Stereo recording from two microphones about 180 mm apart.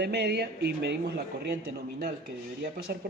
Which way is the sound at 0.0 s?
65° right (ahead or behind).